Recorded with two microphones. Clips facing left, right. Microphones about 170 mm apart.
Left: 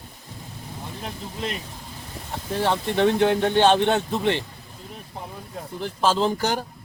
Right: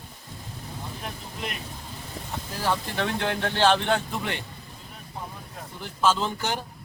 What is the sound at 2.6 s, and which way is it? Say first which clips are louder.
Speech: left 6 dB; 25° left (ahead or behind).